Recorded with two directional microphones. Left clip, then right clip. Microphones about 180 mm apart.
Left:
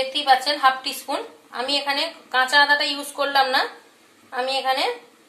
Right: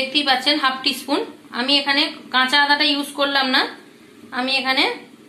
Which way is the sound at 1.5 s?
30° left (ahead or behind).